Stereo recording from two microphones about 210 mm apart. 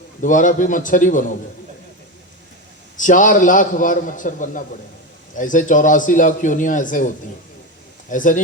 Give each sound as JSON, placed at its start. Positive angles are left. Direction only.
{"t": 0.2, "sound": "a man's voice", "side_deg": 40}
{"t": 3.0, "sound": "a man's voice", "side_deg": 40}
{"t": 8.1, "sound": "a man's voice", "side_deg": 40}